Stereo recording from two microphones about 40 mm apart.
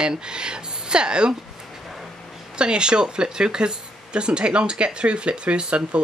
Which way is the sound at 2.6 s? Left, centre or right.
Right.